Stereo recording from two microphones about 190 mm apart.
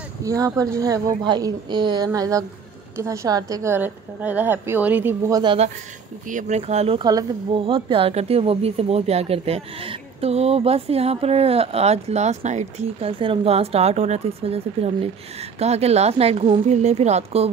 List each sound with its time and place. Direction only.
0.2 s a woman's voice: 20° right (ahead or behind)
5.4 s a woman's voice: 25° right (ahead or behind)
6.2 s speech: 40° right (ahead or behind)
7.0 s speech: 20° right (ahead or behind)